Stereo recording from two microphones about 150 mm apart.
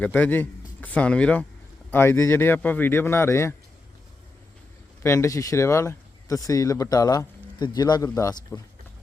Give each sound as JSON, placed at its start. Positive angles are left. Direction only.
{"t": 0.0, "sound": "speech", "side_deg": 10}
{"t": 5.0, "sound": "speech", "side_deg": 20}